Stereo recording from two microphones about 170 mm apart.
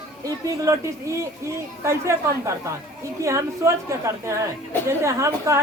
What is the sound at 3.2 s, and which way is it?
A woman's voice, 15° right (ahead or behind).